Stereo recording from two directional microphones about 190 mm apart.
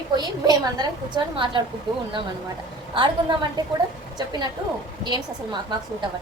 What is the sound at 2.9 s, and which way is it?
A woman's voice, 25° right (ahead or behind).